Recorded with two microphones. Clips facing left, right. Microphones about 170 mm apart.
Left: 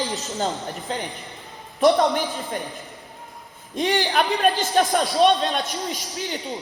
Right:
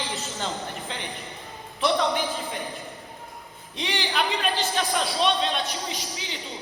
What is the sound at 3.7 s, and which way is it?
A man's voice, 50° left (ahead or behind).